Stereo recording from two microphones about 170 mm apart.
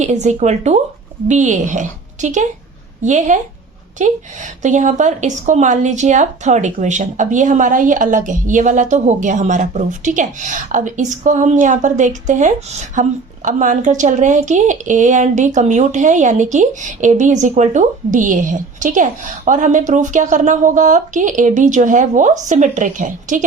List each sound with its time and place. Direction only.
0.0 s speech: 45° right (ahead or behind)